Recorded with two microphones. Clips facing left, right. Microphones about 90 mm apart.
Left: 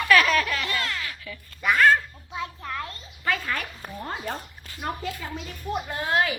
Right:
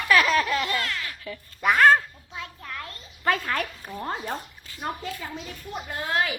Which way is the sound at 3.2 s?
45° right (ahead or behind).